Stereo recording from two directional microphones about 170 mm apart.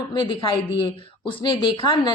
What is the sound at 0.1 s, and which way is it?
A woman's voice, 25° left (ahead or behind).